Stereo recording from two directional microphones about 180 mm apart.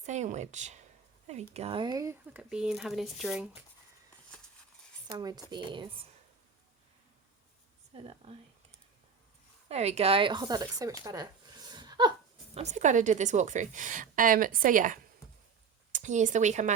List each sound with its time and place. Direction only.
0.0 s speech: 40° right (ahead or behind); by 3.6 s 5° right (ahead or behind)
5.0 s speech: 25° right (ahead or behind)
7.9 s speech: 30° right (ahead or behind)
9.6 s speech: 35° right (ahead or behind); by 10.9 s 20° right (ahead or behind)
11.0 s a sound: 20° right (ahead or behind)
12.5 s a woman's voice: 40° right (ahead or behind)